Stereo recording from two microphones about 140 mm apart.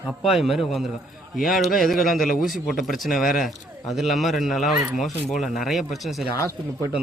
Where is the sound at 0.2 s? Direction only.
Centre (ahead or behind).